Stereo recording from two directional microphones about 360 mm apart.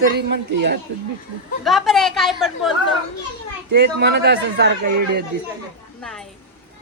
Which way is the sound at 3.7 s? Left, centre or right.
Right.